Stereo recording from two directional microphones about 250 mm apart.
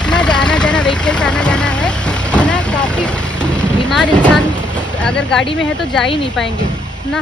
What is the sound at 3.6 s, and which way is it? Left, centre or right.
Vehicle, centre.